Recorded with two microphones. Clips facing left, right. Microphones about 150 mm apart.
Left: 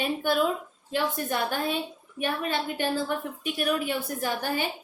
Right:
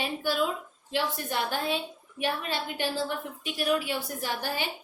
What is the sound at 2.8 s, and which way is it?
A woman's voice, 50° left (ahead or behind).